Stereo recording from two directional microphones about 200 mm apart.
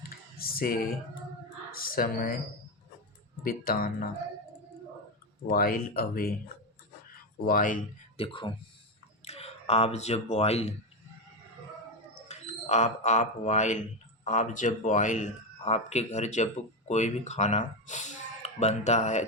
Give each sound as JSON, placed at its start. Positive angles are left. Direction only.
{"t": 0.1, "sound": "music", "side_deg": 50}
{"t": 1.7, "sound": "speech", "side_deg": 45}
{"t": 3.4, "sound": "speech", "side_deg": 45}
{"t": 5.5, "sound": "speech", "side_deg": 45}
{"t": 7.4, "sound": "speech", "side_deg": 45}
{"t": 8.1, "sound": "speech", "side_deg": 25}
{"t": 12.3, "sound": "speech", "side_deg": 35}